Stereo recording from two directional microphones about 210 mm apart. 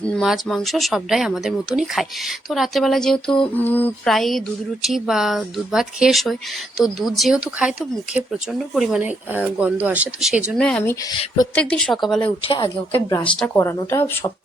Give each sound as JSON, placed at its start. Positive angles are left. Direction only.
{"t": 0.0, "sound": "speech", "side_deg": 0}
{"t": 12.2, "sound": "speech", "side_deg": 25}
{"t": 12.9, "sound": "speech", "side_deg": 15}